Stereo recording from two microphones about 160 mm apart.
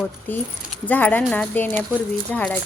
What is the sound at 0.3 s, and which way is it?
Speech, 10° left (ahead or behind).